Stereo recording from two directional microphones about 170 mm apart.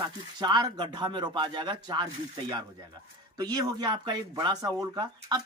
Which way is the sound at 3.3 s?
25° right (ahead or behind).